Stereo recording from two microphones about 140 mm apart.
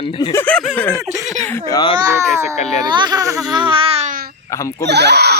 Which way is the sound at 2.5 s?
50° left (ahead or behind).